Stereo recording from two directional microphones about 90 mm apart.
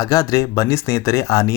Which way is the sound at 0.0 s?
40° left (ahead or behind).